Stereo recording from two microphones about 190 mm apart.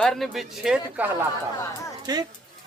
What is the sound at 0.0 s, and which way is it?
Speech, centre (ahead or behind).